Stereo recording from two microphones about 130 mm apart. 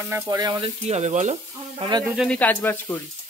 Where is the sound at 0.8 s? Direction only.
60° right (ahead or behind).